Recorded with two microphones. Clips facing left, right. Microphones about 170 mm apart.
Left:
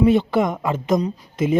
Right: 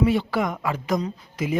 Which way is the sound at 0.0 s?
20° left (ahead or behind).